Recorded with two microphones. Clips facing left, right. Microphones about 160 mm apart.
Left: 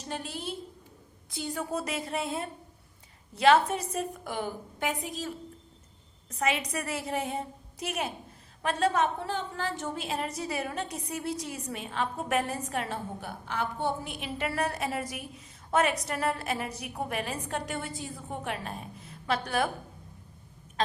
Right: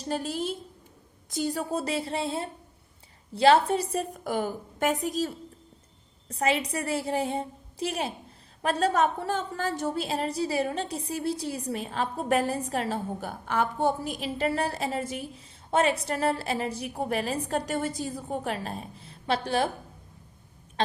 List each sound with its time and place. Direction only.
0.1 s a woman's voice: 40° right (ahead or behind)
6.2 s a woman's voice: 30° right (ahead or behind)
8.6 s a woman's voice: 40° right (ahead or behind)